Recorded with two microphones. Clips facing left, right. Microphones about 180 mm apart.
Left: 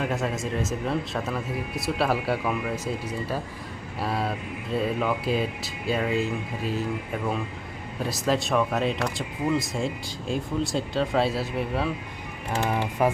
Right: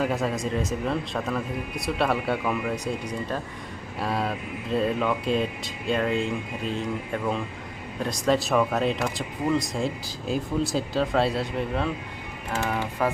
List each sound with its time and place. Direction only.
0.0 s speech: centre (ahead or behind)
13.0 s speech: 15° left (ahead or behind)